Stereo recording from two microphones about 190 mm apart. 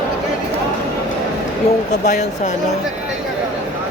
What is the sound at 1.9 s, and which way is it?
Speech, 40° left (ahead or behind).